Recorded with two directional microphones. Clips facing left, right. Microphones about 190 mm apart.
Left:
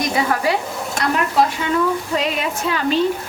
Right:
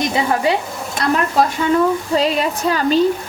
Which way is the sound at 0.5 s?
25° right (ahead or behind).